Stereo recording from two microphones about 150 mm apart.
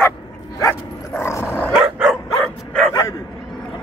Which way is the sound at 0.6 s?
15° left (ahead or behind).